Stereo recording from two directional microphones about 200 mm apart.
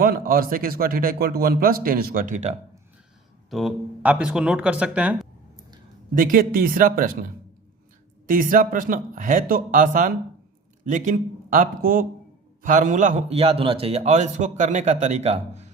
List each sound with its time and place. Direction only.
0.0 s a man's voice: 45° right (ahead or behind)
3.5 s speech: centre (ahead or behind)
6.1 s a man's voice: 45° right (ahead or behind)
8.3 s a man's voice: 40° right (ahead or behind)